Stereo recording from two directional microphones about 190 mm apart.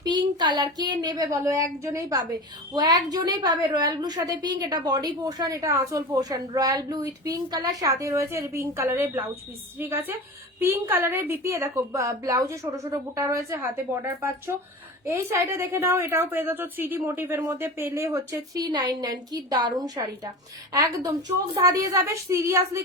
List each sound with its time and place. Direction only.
0.0 s a woman's voice: 20° right (ahead or behind)